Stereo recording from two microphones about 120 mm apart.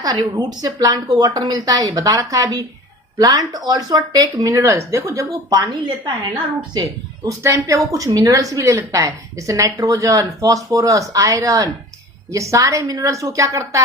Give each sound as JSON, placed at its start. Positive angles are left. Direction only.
{"t": 0.0, "sound": "a woman's voice", "side_deg": -35}
{"t": 7.3, "sound": "a woman's voice", "side_deg": -25}